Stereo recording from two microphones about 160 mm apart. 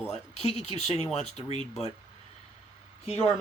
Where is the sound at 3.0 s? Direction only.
40° left (ahead or behind).